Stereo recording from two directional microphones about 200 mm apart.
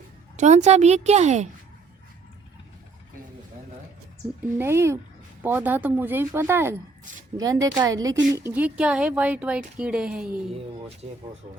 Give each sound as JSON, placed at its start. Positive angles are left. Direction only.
{"t": 0.3, "sound": "a woman's voice", "side_deg": -35}
{"t": 4.5, "sound": "speech", "side_deg": -10}